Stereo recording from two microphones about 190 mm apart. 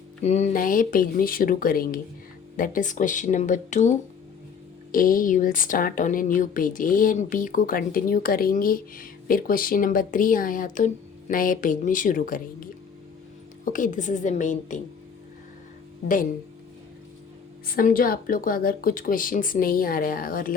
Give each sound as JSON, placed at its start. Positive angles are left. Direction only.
{"t": 0.3, "sound": "a woman's voice", "side_deg": 35}
{"t": 13.7, "sound": "speech", "side_deg": 45}
{"t": 17.7, "sound": "a woman's voice", "side_deg": 50}